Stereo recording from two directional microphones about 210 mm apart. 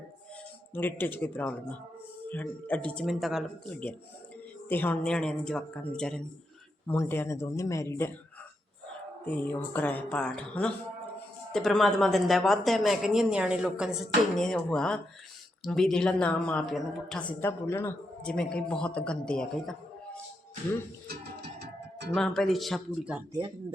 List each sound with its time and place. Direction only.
0.7 s speech: 10° left (ahead or behind)
9.2 s speech: 5° left (ahead or behind)
21.6 s a sound: 55° right (ahead or behind)
22.1 s speech: centre (ahead or behind)